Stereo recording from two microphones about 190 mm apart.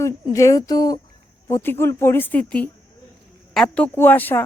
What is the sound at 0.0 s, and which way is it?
Speech, 15° left (ahead or behind).